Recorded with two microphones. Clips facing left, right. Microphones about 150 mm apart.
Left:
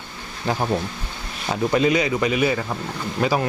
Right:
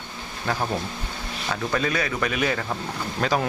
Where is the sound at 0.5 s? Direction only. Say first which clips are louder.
Left 4 dB; 15° left (ahead or behind).